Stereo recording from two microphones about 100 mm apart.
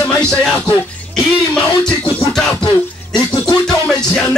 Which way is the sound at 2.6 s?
50° left (ahead or behind).